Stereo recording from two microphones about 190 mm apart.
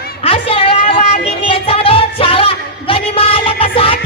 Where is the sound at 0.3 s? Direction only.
30° left (ahead or behind).